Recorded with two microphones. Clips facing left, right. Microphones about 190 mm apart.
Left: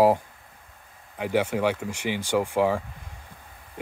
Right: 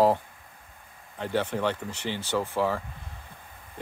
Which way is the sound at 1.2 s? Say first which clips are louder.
Left 4 dB; 10° left (ahead or behind).